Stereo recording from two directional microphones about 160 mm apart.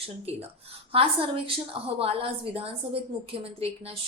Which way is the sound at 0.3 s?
40° right (ahead or behind).